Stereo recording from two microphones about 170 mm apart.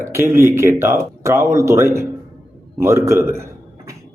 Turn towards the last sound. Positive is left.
turn(degrees=-15)  # may be behind; listen again after turning